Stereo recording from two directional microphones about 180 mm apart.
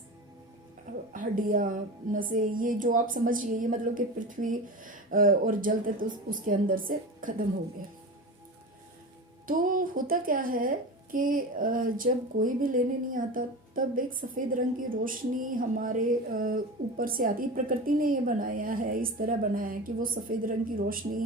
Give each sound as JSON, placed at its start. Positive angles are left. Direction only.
{"t": 1.1, "sound": "speech", "side_deg": -50}
{"t": 9.5, "sound": "speech", "side_deg": -50}